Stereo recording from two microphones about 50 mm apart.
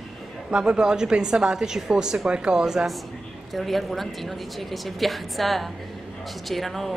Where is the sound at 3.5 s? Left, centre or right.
Centre.